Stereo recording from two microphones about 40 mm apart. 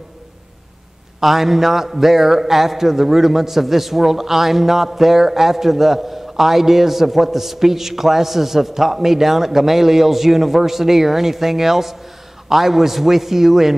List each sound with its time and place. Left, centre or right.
1.2 s a man's voice: centre